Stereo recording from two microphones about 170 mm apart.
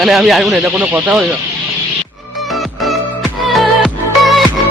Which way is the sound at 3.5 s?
Centre (ahead or behind).